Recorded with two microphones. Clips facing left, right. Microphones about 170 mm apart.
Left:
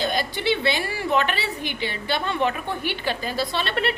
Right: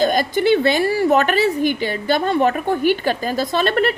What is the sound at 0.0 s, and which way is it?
A woman's voice, 45° right (ahead or behind).